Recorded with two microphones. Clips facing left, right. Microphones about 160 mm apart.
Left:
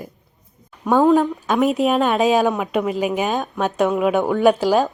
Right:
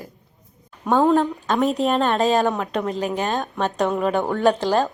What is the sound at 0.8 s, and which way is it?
A woman's voice, centre (ahead or behind).